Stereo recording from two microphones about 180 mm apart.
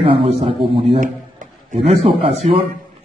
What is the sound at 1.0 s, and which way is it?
Speech, 45° right (ahead or behind).